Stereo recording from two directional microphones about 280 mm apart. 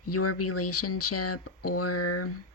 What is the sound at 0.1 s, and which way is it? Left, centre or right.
Speech, left.